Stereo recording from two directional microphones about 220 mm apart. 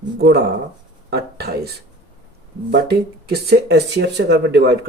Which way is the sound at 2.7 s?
45° right (ahead or behind).